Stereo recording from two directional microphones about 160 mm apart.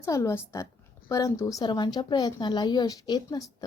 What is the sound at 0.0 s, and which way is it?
A woman's voice, 15° left (ahead or behind).